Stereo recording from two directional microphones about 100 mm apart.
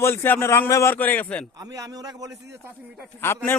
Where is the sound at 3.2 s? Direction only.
25° left (ahead or behind).